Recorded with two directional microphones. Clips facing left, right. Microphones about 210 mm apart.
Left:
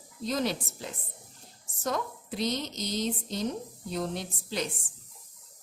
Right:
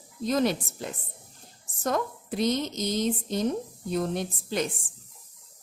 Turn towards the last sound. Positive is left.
turn(degrees=-50)  # may be behind; listen again after turning